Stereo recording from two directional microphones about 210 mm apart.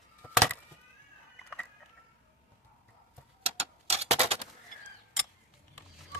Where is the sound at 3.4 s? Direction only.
30° right (ahead or behind).